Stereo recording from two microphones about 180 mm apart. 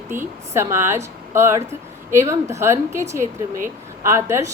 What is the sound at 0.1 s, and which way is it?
A woman's voice, 15° right (ahead or behind).